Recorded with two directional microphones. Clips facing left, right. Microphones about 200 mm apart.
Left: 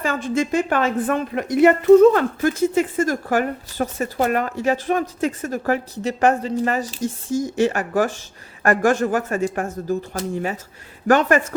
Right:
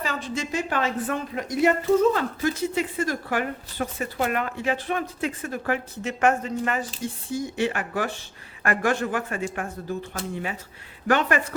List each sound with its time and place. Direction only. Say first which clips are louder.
0.0 s a woman's voice: left 8 dB; 50° left (ahead or behind)